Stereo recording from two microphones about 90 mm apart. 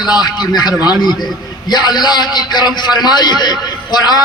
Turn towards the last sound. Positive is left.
turn(degrees=50)  # may be behind; listen again after turning